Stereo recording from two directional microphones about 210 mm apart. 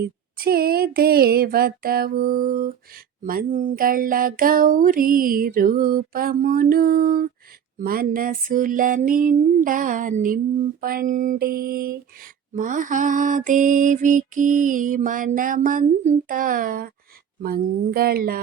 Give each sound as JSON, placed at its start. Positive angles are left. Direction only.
{"t": 0.0, "sound": "speech", "side_deg": -45}
{"t": 7.8, "sound": "a sound", "side_deg": -40}
{"t": 17.4, "sound": "speech", "side_deg": -45}